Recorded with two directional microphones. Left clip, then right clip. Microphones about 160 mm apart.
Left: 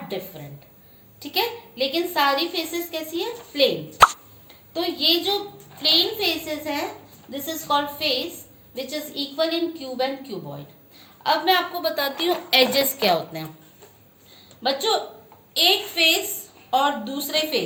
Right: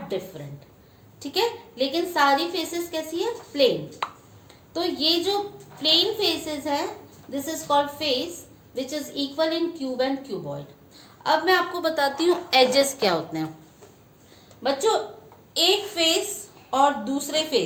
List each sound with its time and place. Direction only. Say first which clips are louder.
1.2 s a woman's voice: even; 25° right (ahead or behind)
4.7 s a woman's voice: left 2 dB; 30° right (ahead or behind)
14.6 s a woman's voice: even; 25° right (ahead or behind)